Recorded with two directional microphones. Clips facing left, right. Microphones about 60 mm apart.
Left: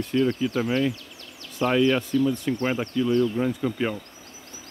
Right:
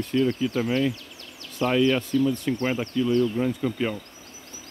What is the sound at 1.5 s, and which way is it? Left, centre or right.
Speech, centre.